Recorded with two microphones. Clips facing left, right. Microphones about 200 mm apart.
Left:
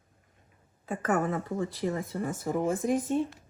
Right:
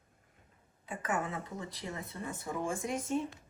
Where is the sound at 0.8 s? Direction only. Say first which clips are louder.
Left 8 dB; 45° left (ahead or behind).